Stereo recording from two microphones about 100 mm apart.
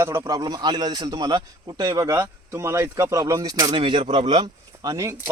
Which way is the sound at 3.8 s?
60° right (ahead or behind).